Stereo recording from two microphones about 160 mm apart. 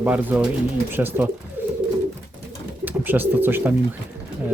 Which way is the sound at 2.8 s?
10° right (ahead or behind).